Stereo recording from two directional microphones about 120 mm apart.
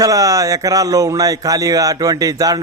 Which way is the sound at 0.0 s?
25° right (ahead or behind).